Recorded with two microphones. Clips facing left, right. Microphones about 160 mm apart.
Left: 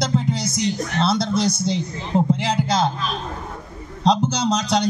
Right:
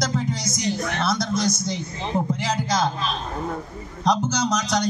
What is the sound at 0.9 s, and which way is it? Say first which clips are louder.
A man's voice: left 4 dB; 30° left (ahead or behind).